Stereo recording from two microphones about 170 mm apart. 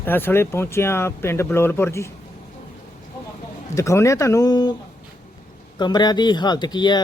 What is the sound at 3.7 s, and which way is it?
Speech, 15° left (ahead or behind).